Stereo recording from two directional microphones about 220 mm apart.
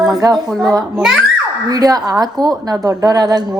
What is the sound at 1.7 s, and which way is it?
A woman's voice, 15° right (ahead or behind).